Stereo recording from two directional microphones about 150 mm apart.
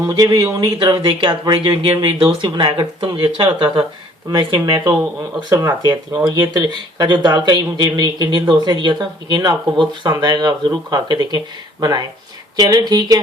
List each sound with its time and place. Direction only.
0.0 s speech: 25° right (ahead or behind)